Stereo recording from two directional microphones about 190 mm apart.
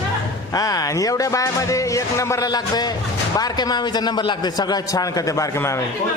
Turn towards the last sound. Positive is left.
turn(degrees=15)  # may be behind; listen again after turning